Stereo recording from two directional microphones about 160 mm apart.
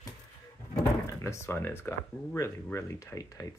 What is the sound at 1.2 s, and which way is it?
Speech, 15° left (ahead or behind).